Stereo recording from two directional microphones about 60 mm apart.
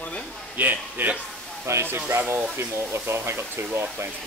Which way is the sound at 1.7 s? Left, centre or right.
Right.